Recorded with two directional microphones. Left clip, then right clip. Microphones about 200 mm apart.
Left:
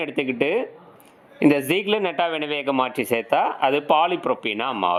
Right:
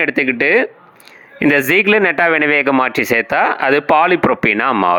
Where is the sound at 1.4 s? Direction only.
15° right (ahead or behind).